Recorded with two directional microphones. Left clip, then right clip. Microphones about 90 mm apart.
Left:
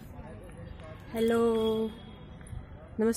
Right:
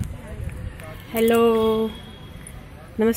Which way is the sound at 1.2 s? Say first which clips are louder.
Right 9 dB; 5° left (ahead or behind).